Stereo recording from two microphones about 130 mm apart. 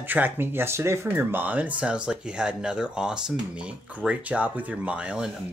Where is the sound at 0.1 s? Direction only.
15° right (ahead or behind).